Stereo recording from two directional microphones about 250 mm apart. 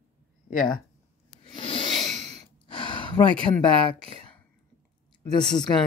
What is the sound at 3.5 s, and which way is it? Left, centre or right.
Speech, centre.